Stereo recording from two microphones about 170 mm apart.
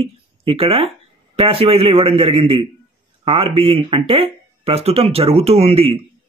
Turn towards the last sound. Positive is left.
turn(degrees=-35)  # may be behind; listen again after turning